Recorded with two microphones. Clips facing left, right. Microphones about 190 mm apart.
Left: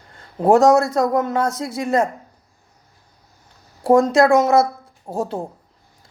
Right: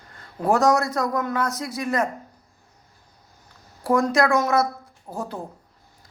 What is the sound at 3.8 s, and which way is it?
Speech, 25° left (ahead or behind).